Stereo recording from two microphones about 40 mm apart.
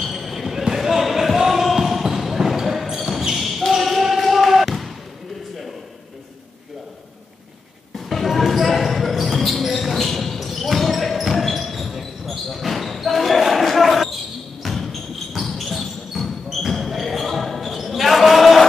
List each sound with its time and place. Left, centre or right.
0.0 s basketball bounce: centre
7.9 s basketball bounce: centre
14.6 s a sound: centre
15.5 s basketball bounce: centre